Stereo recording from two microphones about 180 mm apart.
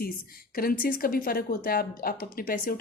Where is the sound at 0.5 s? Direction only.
55° left (ahead or behind).